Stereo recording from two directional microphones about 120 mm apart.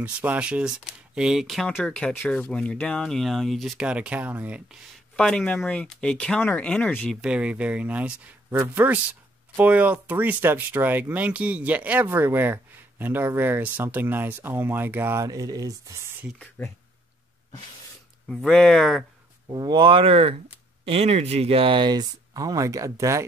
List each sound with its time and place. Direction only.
0.0 s speech: 10° right (ahead or behind)
1.8 s speech: 10° left (ahead or behind); by 4.6 s 10° right (ahead or behind)
5.1 s speech: 5° left (ahead or behind)
7.1 s speech: 5° right (ahead or behind)
15.2 s speech: 30° right (ahead or behind)
16.6 s speech: 15° left (ahead or behind)
18.3 s speech: 5° left (ahead or behind)
19.5 s speech: 40° right (ahead or behind)